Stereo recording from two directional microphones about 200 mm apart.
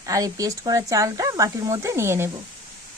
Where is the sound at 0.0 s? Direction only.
15° right (ahead or behind).